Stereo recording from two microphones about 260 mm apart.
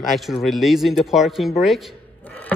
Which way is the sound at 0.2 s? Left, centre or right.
Centre.